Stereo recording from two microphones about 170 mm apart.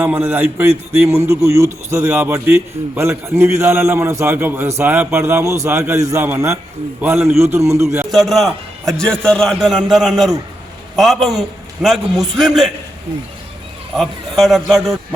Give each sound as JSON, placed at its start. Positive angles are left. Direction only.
{"t": 0.0, "sound": "a man's voice", "side_deg": -10}
{"t": 8.1, "sound": "a man's voice", "side_deg": 0}
{"t": 13.9, "sound": "a man's voice", "side_deg": 0}